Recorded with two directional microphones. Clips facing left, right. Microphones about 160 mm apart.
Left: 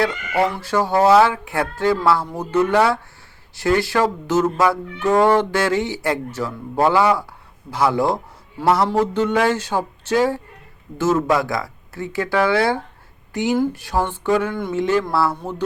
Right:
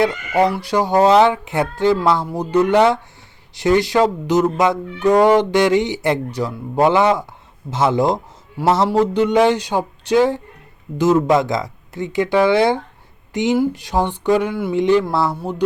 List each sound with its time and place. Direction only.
0.0 s a man's voice: 15° right (ahead or behind)